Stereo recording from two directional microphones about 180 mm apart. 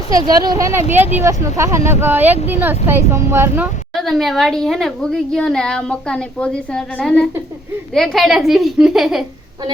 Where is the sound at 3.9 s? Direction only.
Centre (ahead or behind).